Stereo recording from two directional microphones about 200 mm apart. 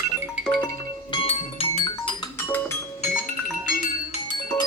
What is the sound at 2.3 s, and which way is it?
Music, 10° left (ahead or behind).